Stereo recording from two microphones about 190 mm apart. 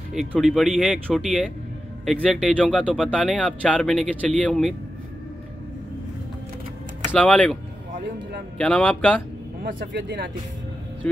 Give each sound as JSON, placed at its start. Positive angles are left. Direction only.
{"t": 0.1, "sound": "speech", "side_deg": 0}
{"t": 7.2, "sound": "speech", "side_deg": 5}
{"t": 8.5, "sound": "speech", "side_deg": 5}
{"t": 9.9, "sound": "speech", "side_deg": -65}